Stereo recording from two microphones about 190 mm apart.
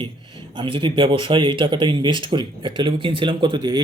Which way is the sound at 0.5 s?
25° right (ahead or behind).